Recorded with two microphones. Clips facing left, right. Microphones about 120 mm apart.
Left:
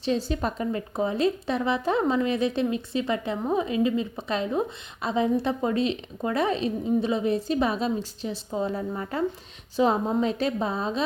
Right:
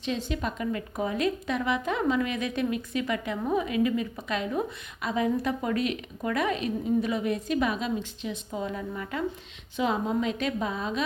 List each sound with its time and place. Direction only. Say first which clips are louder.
0.0 s a woman's voice: left 4 dB; 35° left (ahead or behind)